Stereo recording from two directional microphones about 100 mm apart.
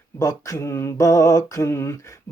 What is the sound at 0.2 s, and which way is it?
Speech, 35° left (ahead or behind).